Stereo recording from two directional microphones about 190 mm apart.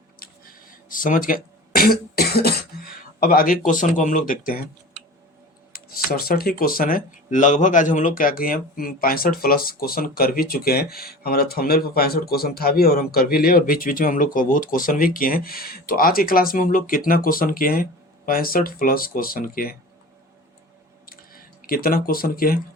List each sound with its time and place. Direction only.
0.2 s throat clearing: 50° left (ahead or behind)
3.7 s speech: 40° left (ahead or behind)
5.7 s speech: 50° left (ahead or behind)
21.1 s a sound: 50° left (ahead or behind)